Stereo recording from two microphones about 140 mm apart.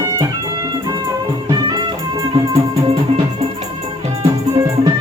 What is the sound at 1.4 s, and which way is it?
Music, 30° right (ahead or behind).